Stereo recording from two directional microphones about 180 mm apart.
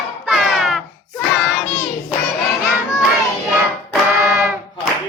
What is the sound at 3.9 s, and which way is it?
Music, 5° right (ahead or behind).